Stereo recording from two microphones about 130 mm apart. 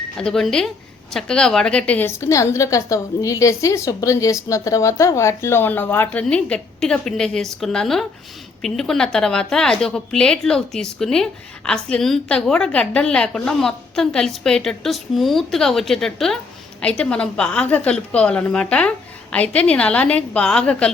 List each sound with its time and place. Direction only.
0.2 s a woman's voice: 5° left (ahead or behind)
2.0 s a woman's voice: 20° left (ahead or behind)